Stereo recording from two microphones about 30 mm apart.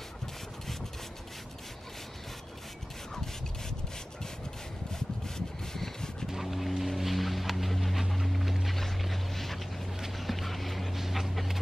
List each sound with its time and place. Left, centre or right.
5.7 s vehicle: centre
6.3 s vehicle: centre
8.1 s a sound: centre
9.0 s boat: centre
10.1 s vehicle: centre
11.0 s dog: centre